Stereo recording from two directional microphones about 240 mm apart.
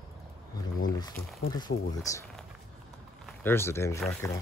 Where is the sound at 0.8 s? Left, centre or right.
Centre.